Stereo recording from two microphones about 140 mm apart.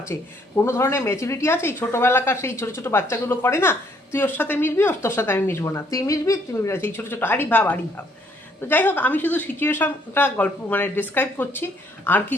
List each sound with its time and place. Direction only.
0.1 s a woman's voice: 20° left (ahead or behind)